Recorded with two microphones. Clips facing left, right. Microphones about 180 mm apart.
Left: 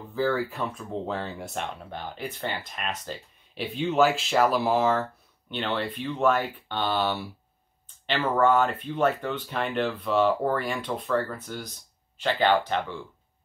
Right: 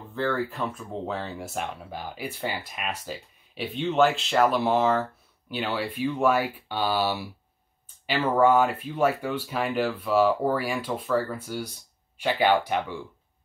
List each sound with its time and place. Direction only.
0.1 s speech: centre (ahead or behind)